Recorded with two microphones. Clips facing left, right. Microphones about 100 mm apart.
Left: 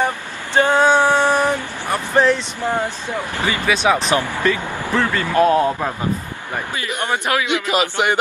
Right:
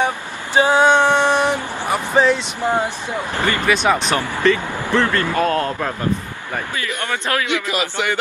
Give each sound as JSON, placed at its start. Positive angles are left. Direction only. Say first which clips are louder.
{"t": 0.6, "sound": "speech", "louder": "right 1 dB", "side_deg": -15}
{"t": 0.8, "sound": "a sound", "louder": "even", "side_deg": 10}
{"t": 1.3, "sound": "vehicle", "louder": "even", "side_deg": -20}
{"t": 2.1, "sound": "speech", "louder": "even", "side_deg": -5}
{"t": 2.6, "sound": "speech", "louder": "right 2 dB", "side_deg": -15}
{"t": 3.3, "sound": "speech", "louder": "right 2 dB", "side_deg": 15}
{"t": 3.6, "sound": "a man's voice", "louder": "left 1 dB", "side_deg": 0}